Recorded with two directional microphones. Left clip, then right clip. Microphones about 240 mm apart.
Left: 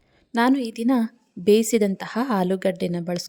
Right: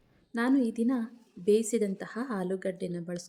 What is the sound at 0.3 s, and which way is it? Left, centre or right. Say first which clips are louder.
A woman's voice: left 7 dB; left.